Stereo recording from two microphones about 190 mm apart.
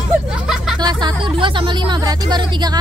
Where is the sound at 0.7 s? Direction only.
20° right (ahead or behind).